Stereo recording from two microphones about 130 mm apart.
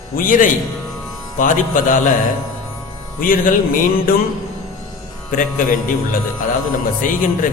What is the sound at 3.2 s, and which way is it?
Speech, 90° left.